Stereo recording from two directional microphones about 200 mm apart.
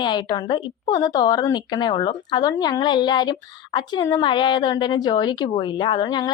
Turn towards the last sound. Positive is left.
turn(degrees=20)  # may be behind; listen again after turning